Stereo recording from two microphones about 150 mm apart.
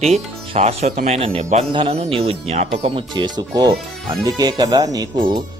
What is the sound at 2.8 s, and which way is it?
Speech, 30° right (ahead or behind).